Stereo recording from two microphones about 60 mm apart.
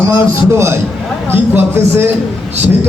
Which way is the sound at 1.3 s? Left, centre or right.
Right.